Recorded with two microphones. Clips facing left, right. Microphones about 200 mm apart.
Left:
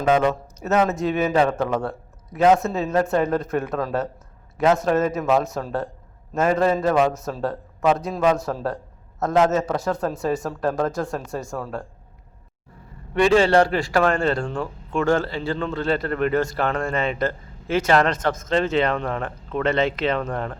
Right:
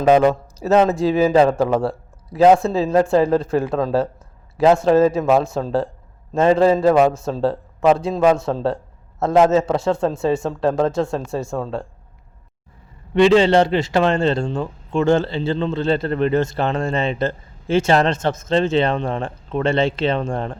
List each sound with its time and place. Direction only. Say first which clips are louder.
0.0 s a man's voice: right 5 dB; 35° right (ahead or behind)
13.1 s a man's voice: right 3 dB; 20° right (ahead or behind)